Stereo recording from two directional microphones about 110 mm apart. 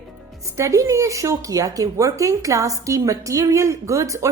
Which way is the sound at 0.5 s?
25° right (ahead or behind).